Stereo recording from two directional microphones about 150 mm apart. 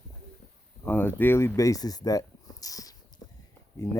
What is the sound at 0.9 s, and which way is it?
Speech, 15° left (ahead or behind).